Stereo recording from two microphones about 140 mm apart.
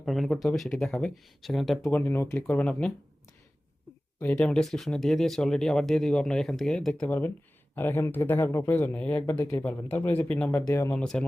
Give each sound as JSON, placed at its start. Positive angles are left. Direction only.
{"t": 0.0, "sound": "speech", "side_deg": 0}
{"t": 1.9, "sound": "speech", "side_deg": 15}
{"t": 4.2, "sound": "speech", "side_deg": 10}
{"t": 10.5, "sound": "speech", "side_deg": 20}
{"t": 10.9, "sound": "speech", "side_deg": 5}